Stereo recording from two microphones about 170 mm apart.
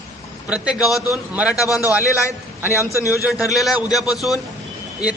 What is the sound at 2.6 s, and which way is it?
Speech, 15° right (ahead or behind).